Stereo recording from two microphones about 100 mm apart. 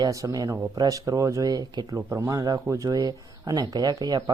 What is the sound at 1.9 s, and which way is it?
Speech, 25° right (ahead or behind).